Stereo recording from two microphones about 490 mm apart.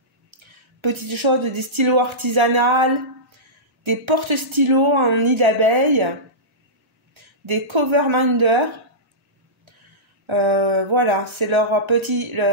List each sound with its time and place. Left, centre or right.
0.3 s speech: right
7.4 s speech: right
10.2 s speech: right